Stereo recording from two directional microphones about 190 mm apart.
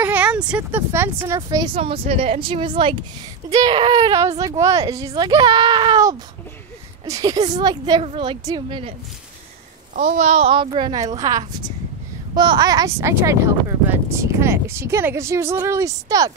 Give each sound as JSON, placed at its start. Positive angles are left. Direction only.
{"t": 0.0, "sound": "a woman's voice", "side_deg": -10}
{"t": 1.8, "sound": "a woman's voice", "side_deg": -30}
{"t": 9.9, "sound": "a child's voice", "side_deg": -35}